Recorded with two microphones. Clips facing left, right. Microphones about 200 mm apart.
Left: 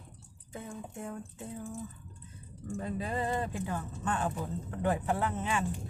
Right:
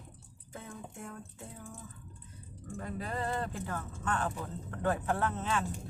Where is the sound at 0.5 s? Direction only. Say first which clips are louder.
Left 4 dB; 15° left (ahead or behind).